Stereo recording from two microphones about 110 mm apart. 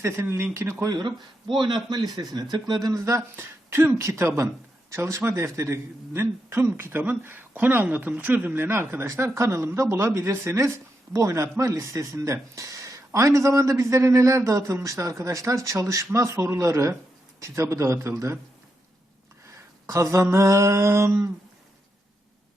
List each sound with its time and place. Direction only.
0.0 s a man's voice: 25° right (ahead or behind)
0.9 s a man's voice: 45° right (ahead or behind); by 18.3 s 25° right (ahead or behind)
19.9 s a man's voice: 30° right (ahead or behind)